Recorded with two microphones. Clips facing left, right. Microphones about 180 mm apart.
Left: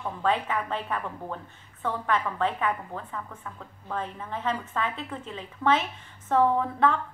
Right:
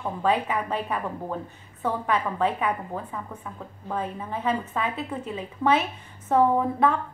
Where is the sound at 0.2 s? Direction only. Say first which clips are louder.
Right 2 dB; 15° right (ahead or behind).